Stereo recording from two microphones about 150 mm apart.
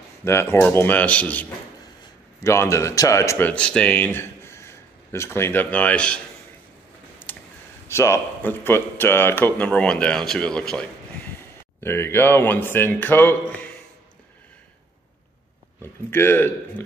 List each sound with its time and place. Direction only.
0.2 s speech: 15° left (ahead or behind)
7.3 s a sound: 15° left (ahead or behind)
7.9 s speech: 20° left (ahead or behind)
11.8 s speech: 15° left (ahead or behind)
15.8 s speech: 15° left (ahead or behind)